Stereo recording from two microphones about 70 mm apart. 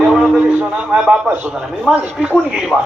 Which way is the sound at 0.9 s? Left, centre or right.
Centre.